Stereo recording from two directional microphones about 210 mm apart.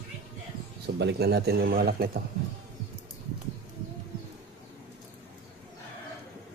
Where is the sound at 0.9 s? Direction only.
55° right (ahead or behind).